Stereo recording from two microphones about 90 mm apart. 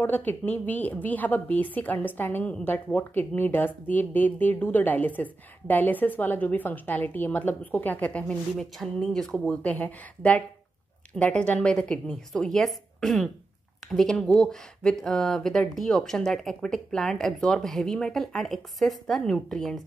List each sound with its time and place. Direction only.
0.0 s speech: 20° left (ahead or behind)
8.5 s speech: 5° left (ahead or behind)
9.5 s a woman's voice: 15° left (ahead or behind)